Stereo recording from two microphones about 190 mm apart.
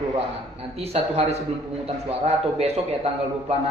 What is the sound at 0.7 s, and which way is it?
A man's voice, 30° right (ahead or behind).